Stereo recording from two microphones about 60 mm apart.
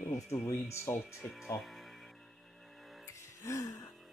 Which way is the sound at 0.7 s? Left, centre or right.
Left.